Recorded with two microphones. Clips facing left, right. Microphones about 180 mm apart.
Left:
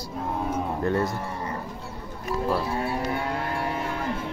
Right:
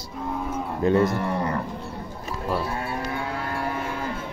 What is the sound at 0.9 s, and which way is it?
Speech, 70° right (ahead or behind).